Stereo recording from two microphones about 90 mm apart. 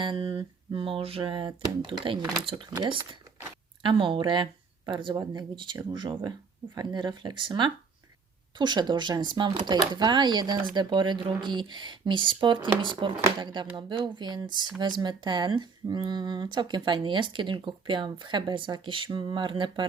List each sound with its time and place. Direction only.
0.0 s music: 70° right (ahead or behind)
2.8 s speech: 65° right (ahead or behind)